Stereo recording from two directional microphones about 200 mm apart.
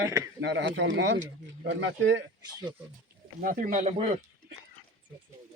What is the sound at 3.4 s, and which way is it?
Speech, 40° right (ahead or behind).